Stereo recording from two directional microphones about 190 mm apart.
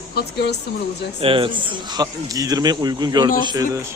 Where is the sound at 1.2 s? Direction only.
25° right (ahead or behind).